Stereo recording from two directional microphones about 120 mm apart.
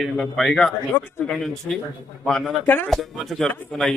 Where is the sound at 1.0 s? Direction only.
15° left (ahead or behind).